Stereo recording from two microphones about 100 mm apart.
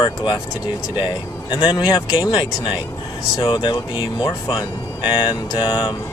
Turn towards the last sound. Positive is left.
turn(degrees=55)  # may be behind; listen again after turning